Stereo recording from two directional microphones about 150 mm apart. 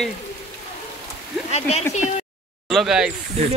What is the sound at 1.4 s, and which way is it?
Speech, 45° left (ahead or behind).